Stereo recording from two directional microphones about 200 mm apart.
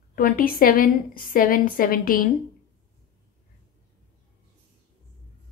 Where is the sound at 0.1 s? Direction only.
45° left (ahead or behind).